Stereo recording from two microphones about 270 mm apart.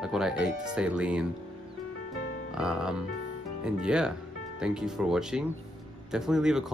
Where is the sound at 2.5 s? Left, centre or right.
Centre.